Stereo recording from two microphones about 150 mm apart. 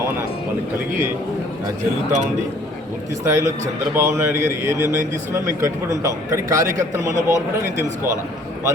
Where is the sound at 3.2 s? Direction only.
20° right (ahead or behind).